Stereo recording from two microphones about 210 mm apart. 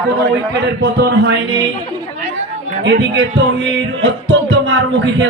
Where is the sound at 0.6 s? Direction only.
50° right (ahead or behind).